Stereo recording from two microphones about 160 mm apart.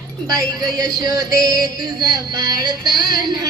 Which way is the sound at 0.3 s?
25° right (ahead or behind).